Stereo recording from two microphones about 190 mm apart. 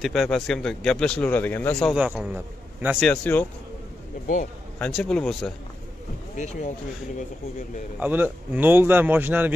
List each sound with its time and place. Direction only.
0.0 s speech: centre (ahead or behind)
2.0 s a man's voice: 5° right (ahead or behind)
3.1 s a man's voice: 10° left (ahead or behind)
4.7 s speech: 5° left (ahead or behind)
6.3 s speech: 35° left (ahead or behind)
8.0 s a man's voice: 10° right (ahead or behind)